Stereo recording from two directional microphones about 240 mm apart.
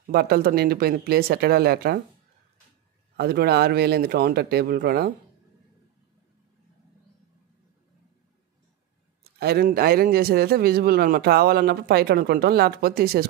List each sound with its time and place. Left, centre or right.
0.0 s a man's voice: right
3.2 s a man's voice: right
9.2 s a man's voice: right